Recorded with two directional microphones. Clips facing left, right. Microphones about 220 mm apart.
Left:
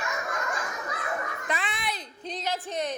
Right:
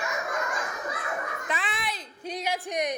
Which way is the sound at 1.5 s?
Centre (ahead or behind).